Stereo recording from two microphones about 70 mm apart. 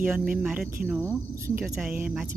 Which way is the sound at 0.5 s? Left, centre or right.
Centre.